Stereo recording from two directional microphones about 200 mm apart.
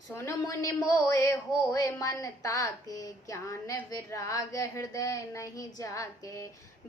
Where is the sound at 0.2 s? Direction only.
15° left (ahead or behind).